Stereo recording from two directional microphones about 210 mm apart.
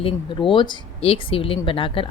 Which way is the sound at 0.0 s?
25° left (ahead or behind).